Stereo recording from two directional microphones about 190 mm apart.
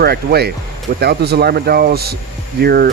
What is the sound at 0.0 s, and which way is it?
Speech, 55° right (ahead or behind).